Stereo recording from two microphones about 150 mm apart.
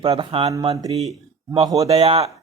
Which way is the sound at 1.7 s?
40° right (ahead or behind).